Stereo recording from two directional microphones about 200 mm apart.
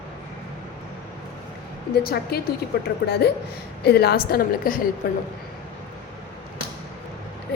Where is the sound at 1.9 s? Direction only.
50° left (ahead or behind).